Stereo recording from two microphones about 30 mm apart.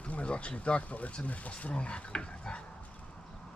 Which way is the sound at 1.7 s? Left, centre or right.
Left.